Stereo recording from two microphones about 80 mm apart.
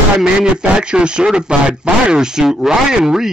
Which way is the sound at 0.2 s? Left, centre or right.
Centre.